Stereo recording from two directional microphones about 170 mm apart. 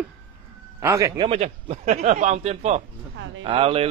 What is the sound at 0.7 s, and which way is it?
Speech, 15° right (ahead or behind).